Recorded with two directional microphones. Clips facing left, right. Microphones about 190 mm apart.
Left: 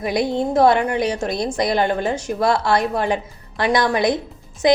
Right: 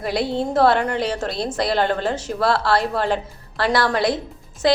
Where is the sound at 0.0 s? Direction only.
15° left (ahead or behind).